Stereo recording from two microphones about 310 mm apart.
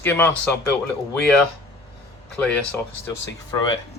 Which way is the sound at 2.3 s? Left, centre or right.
Centre.